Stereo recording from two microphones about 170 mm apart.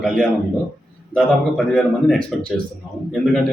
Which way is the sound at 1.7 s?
5° left (ahead or behind).